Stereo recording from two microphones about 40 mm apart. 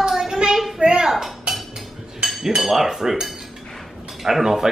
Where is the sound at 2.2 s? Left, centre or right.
Centre.